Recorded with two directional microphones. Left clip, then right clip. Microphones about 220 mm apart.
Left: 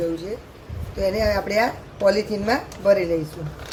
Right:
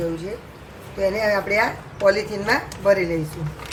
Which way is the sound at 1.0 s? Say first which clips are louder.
Right 1 dB; 25° left (ahead or behind).